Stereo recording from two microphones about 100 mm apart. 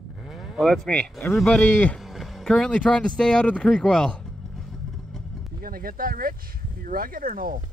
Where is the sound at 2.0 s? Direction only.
Centre (ahead or behind).